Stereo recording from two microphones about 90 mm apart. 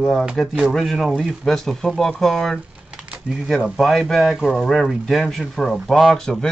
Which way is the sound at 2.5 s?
10° right (ahead or behind).